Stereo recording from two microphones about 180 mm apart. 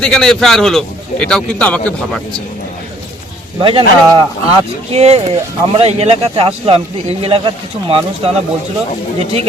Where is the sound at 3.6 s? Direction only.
30° right (ahead or behind).